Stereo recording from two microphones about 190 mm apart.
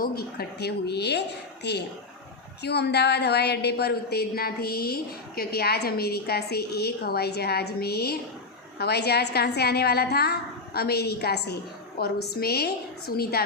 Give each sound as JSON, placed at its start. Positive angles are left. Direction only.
{"t": 0.0, "sound": "a woman's voice", "side_deg": 55}